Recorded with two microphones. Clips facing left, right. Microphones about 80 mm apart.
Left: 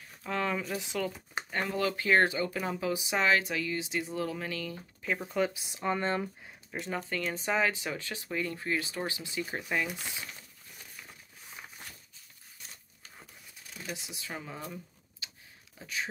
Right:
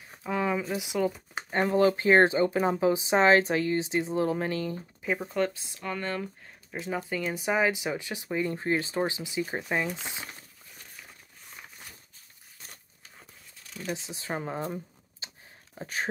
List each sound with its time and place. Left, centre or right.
0.2 s speech: centre
1.5 s speech: right
5.2 s speech: centre
5.5 s speech: centre
6.7 s speech: centre; by 9.8 s right
13.8 s speech: right